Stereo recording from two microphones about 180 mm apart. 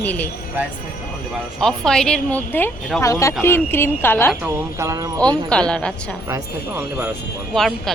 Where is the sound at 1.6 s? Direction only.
5° left (ahead or behind).